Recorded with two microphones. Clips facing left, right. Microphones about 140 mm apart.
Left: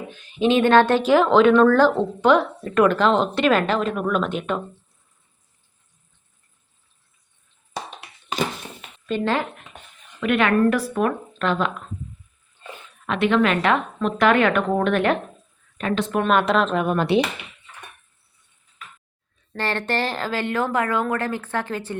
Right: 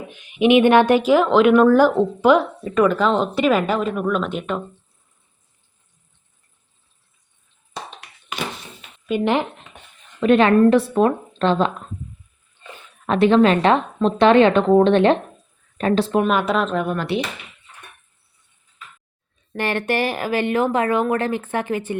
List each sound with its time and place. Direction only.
0.1 s speech: 15° right (ahead or behind)
9.0 s speech: 15° right (ahead or behind)
10.2 s a woman's voice: 30° right (ahead or behind)
13.1 s a woman's voice: 35° right (ahead or behind)
16.2 s speech: 5° right (ahead or behind)
16.8 s speech: 20° left (ahead or behind)
19.5 s speech: 15° right (ahead or behind)